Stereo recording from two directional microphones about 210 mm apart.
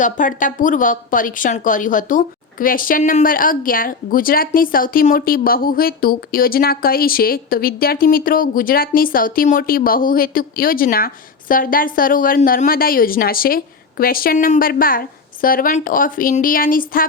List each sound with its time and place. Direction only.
0.0 s speech: 40° left (ahead or behind)